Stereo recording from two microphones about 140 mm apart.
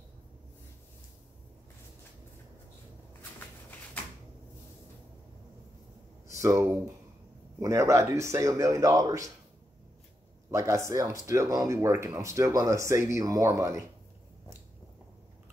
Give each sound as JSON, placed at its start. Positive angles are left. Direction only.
{"t": 6.3, "sound": "speech", "side_deg": -20}
{"t": 10.5, "sound": "speech", "side_deg": -20}